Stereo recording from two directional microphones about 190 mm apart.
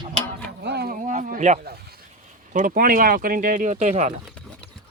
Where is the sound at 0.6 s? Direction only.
60° right (ahead or behind); by 1.6 s 40° right (ahead or behind).